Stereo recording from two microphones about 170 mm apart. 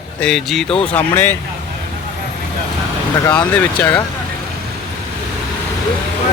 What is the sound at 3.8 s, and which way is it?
Speech, 5° left (ahead or behind).